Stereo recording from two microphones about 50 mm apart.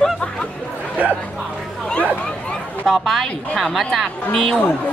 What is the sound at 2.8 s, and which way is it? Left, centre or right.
Speech, centre.